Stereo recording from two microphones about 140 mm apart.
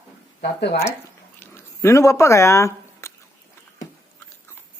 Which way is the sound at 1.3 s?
20° left (ahead or behind).